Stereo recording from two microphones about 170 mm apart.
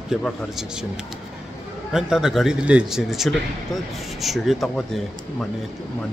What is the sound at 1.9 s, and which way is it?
Speech, 5° right (ahead or behind).